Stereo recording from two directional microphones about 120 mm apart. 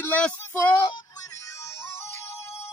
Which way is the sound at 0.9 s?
25° left (ahead or behind).